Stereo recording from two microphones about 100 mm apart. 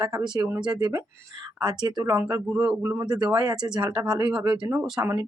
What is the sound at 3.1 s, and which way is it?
Speech, 45° right (ahead or behind).